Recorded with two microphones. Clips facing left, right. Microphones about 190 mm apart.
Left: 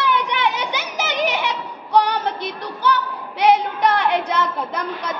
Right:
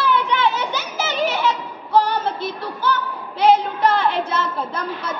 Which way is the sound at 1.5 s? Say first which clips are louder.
Right 4 dB; 15° left (ahead or behind).